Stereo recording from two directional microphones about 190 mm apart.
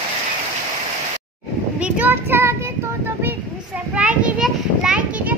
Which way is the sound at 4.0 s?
5° right (ahead or behind).